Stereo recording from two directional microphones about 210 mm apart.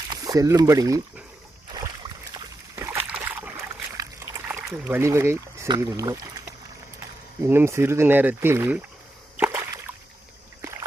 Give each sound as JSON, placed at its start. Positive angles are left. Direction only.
{"t": 0.1, "sound": "speech", "side_deg": -15}
{"t": 2.3, "sound": "boat", "side_deg": -15}
{"t": 7.4, "sound": "speech", "side_deg": -10}
{"t": 9.4, "sound": "a sound", "side_deg": -10}